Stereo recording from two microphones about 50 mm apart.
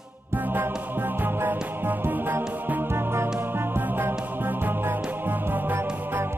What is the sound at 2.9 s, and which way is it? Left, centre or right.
Music, right.